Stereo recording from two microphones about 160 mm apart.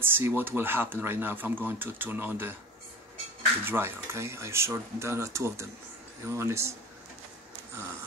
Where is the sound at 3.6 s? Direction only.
15° right (ahead or behind).